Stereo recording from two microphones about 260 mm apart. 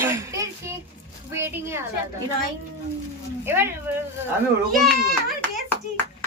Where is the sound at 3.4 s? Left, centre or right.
Centre.